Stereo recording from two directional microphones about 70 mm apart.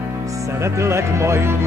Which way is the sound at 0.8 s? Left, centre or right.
Right.